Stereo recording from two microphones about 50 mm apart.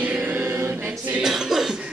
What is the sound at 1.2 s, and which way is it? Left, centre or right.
Cough, centre.